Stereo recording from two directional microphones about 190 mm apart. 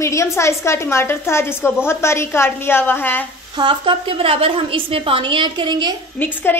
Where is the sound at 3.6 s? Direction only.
25° right (ahead or behind).